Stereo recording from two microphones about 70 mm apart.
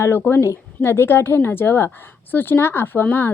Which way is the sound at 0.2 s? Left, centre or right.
Left.